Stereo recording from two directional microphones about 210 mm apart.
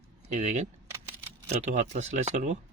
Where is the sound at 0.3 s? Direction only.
35° right (ahead or behind).